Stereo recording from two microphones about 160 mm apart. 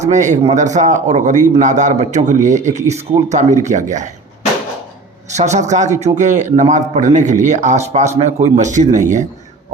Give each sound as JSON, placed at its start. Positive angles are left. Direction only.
{"t": 0.0, "sound": "a man's voice", "side_deg": -50}
{"t": 5.3, "sound": "a man's voice", "side_deg": -45}